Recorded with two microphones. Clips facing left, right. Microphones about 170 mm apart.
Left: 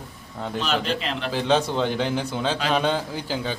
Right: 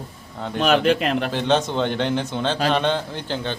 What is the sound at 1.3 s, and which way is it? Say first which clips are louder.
A man's voice: left 3 dB; 5° left (ahead or behind).